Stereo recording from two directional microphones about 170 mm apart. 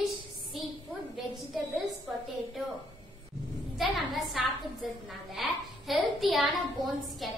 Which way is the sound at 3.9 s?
Centre (ahead or behind).